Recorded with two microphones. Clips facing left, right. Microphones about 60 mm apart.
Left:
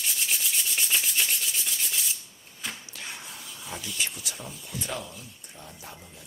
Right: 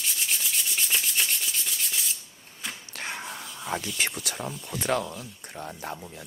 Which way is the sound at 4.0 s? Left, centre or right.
Right.